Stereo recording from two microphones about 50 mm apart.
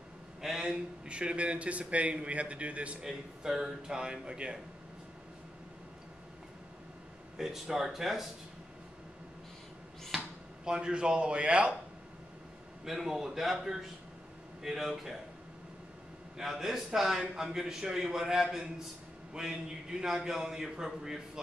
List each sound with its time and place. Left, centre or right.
0.4 s a man's voice: centre
1.0 s a man's voice: right
3.0 s speech: centre
7.3 s speech: centre
10.1 s speech: centre
12.8 s speech: centre
16.3 s a man's voice: centre